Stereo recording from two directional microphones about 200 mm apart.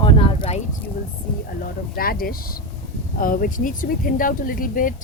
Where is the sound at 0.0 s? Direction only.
25° left (ahead or behind).